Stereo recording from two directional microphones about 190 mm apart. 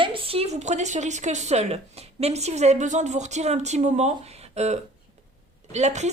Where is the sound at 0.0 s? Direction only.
30° right (ahead or behind).